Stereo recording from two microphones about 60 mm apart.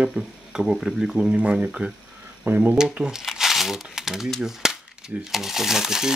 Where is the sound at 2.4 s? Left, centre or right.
Right.